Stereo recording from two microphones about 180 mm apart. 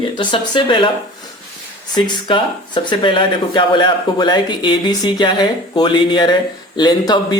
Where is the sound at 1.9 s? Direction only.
25° left (ahead or behind).